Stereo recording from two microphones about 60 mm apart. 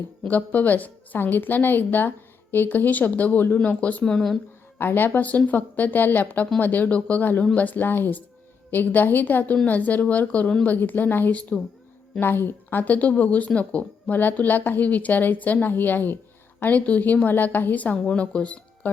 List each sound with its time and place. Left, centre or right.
0.2 s a woman's voice: left
4.0 s speech: centre
4.8 s a woman's voice: left
10.8 s a woman's voice: left
11.3 s speech: left
12.2 s speech: left